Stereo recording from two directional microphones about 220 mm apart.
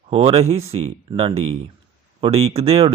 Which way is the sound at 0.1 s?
25° right (ahead or behind).